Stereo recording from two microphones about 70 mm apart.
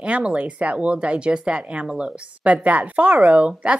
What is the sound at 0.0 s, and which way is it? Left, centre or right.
Speech, centre.